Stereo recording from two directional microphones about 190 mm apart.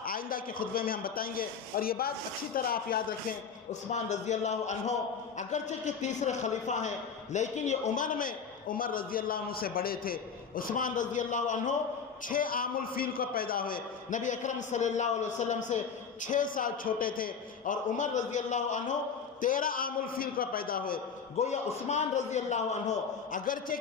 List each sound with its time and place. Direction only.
0.0 s a man's voice: 50° left (ahead or behind)
21.3 s a man's voice: 35° left (ahead or behind)